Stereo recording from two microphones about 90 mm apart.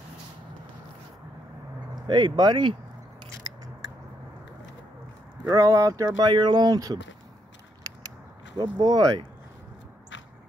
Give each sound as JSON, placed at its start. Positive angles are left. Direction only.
{"t": 2.0, "sound": "speech", "side_deg": -55}
{"t": 5.4, "sound": "speech", "side_deg": -40}
{"t": 6.1, "sound": "speech", "side_deg": -55}
{"t": 7.8, "sound": "biting", "side_deg": -40}
{"t": 8.5, "sound": "speech", "side_deg": -50}